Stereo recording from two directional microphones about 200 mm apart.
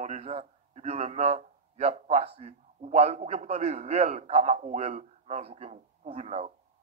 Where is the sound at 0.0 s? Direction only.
35° right (ahead or behind).